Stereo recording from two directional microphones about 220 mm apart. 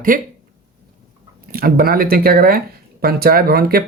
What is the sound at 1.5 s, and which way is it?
Speech, 45° right (ahead or behind).